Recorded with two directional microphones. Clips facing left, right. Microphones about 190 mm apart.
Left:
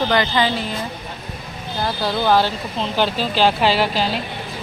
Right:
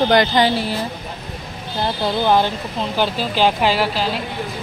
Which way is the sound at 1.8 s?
25° right (ahead or behind).